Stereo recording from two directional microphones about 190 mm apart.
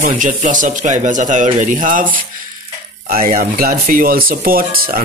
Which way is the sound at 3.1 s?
50° right (ahead or behind).